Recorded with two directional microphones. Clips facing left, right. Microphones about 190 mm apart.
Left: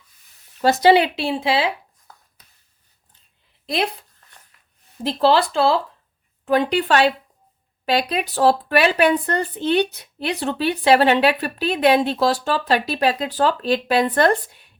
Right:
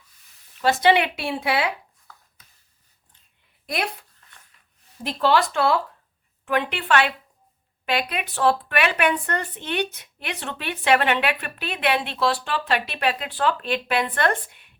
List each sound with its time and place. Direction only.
0.6 s speech: 40° left (ahead or behind)
5.0 s speech: 30° left (ahead or behind)